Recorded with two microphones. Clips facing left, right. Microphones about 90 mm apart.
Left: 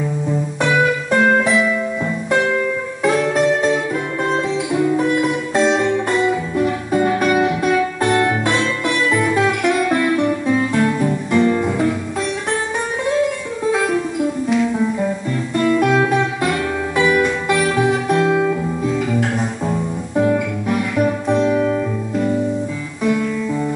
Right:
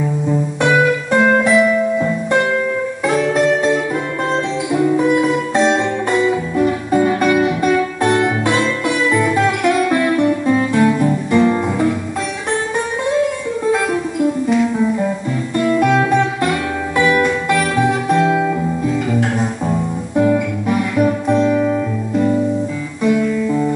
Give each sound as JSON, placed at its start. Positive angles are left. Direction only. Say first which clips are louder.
{"t": 0.6, "sound": "music", "louder": "right 2 dB", "side_deg": 0}
{"t": 13.7, "sound": "music", "louder": "even", "side_deg": 0}
{"t": 23.0, "sound": "guitar", "louder": "right 3 dB", "side_deg": 0}